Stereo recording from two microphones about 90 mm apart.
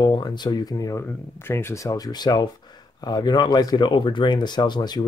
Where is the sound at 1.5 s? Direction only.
25° left (ahead or behind).